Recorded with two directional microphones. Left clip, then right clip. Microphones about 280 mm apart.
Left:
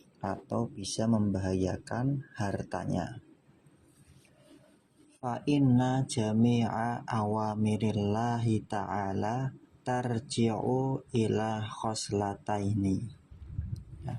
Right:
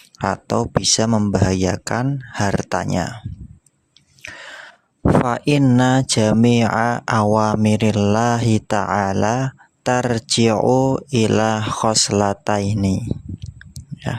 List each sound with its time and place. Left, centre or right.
0.2 s speech: right
5.2 s speech: right